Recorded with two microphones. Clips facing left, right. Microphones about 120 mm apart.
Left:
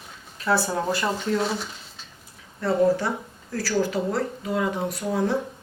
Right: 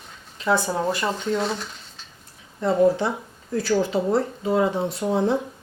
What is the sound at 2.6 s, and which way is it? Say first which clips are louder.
Speech: right 2 dB; 20° right (ahead or behind).